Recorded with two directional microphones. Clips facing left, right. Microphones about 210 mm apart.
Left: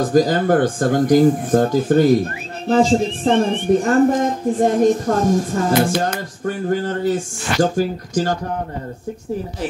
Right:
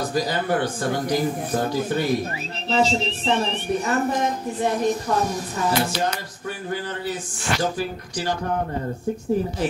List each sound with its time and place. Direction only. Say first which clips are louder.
0.0 s a woman's voice: left 9 dB; 45° left (ahead or behind)